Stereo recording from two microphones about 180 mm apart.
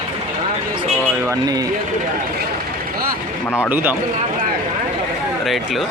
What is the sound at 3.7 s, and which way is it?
Speech, 10° right (ahead or behind).